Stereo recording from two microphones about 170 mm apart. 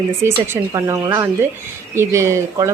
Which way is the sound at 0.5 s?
15° right (ahead or behind).